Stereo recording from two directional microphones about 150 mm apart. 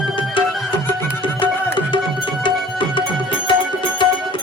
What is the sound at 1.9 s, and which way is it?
Music, 30° left (ahead or behind).